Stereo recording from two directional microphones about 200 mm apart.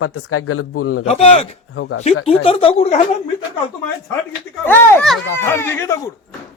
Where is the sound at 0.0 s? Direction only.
90° left.